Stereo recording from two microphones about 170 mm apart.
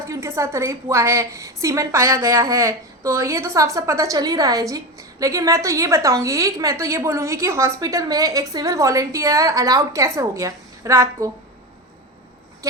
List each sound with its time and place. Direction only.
0.0 s a woman's voice: 15° right (ahead or behind)